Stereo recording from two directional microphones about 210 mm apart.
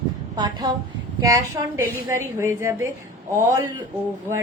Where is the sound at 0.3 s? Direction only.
20° right (ahead or behind).